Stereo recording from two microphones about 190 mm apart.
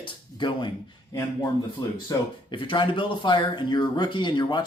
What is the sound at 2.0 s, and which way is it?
Speech, 25° left (ahead or behind).